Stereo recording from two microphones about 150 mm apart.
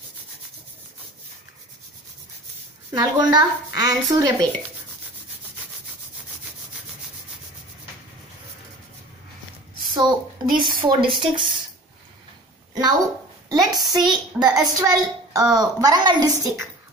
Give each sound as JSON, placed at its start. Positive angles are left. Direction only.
{"t": 2.9, "sound": "a woman's voice", "side_deg": -30}
{"t": 9.9, "sound": "speech", "side_deg": -30}
{"t": 13.5, "sound": "a woman's voice", "side_deg": -25}